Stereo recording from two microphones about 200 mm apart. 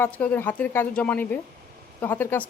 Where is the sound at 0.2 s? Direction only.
10° left (ahead or behind).